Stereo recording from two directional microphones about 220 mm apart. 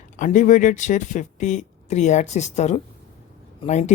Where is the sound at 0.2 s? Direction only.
35° left (ahead or behind).